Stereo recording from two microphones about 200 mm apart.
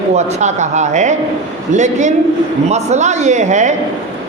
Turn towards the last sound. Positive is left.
turn(degrees=-35)  # may be behind; listen again after turning